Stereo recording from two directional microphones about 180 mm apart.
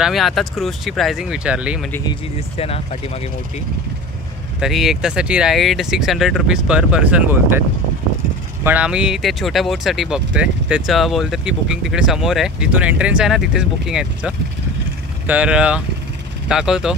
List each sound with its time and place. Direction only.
0.0 s speech: centre (ahead or behind)
2.0 s speech: 35° left (ahead or behind)
4.6 s speech: centre (ahead or behind)
8.6 s speech: 5° right (ahead or behind)